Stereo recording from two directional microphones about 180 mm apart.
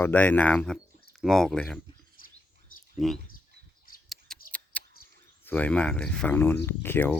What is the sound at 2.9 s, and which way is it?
Speech, centre (ahead or behind).